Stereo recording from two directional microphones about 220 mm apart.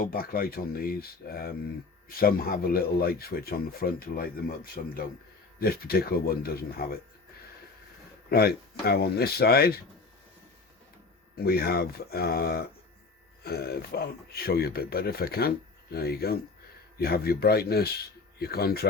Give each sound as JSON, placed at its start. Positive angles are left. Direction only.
{"t": 0.0, "sound": "speech", "side_deg": 40}
{"t": 8.3, "sound": "speech", "side_deg": 45}
{"t": 11.3, "sound": "speech", "side_deg": 45}